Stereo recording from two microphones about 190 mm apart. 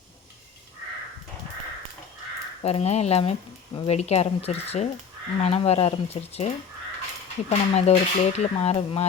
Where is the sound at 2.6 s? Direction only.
35° left (ahead or behind).